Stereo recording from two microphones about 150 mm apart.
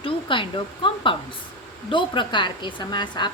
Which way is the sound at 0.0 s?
35° left (ahead or behind).